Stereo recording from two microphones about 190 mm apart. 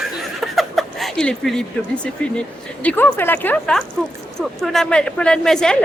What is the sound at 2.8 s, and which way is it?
A woman's voice, 10° left (ahead or behind).